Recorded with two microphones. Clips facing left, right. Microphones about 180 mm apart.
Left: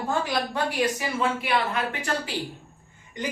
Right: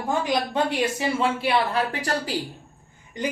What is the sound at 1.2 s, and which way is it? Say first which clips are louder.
Speech: right 3 dB; 35° right (ahead or behind).